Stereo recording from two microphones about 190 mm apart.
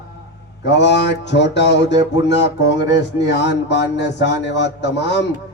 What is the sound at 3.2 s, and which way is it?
A man's voice, 65° left (ahead or behind).